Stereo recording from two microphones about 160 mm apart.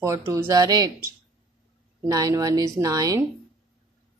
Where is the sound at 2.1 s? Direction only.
20° right (ahead or behind).